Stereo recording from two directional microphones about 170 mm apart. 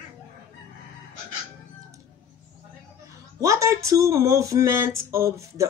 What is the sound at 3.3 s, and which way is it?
Speech, 20° right (ahead or behind).